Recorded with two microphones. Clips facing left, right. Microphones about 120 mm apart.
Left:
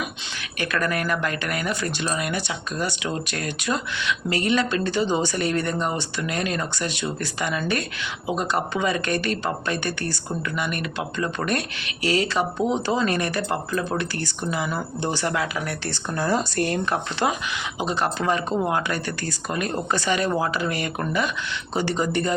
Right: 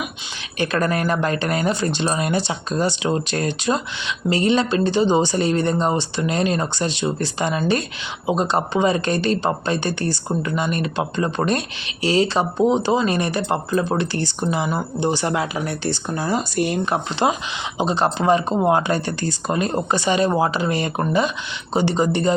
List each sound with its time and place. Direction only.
0.6 s speech: 30° right (ahead or behind)